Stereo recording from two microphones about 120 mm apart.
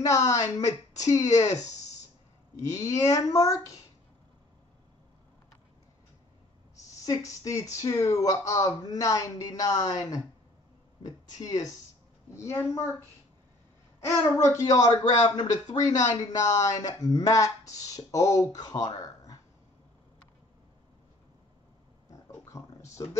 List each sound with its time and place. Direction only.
0.0 s speech: 25° left (ahead or behind)
3.1 s speech: 25° left (ahead or behind)
6.8 s speech: 25° left (ahead or behind)
14.0 s speech: 25° left (ahead or behind)
22.1 s oink: 25° left (ahead or behind)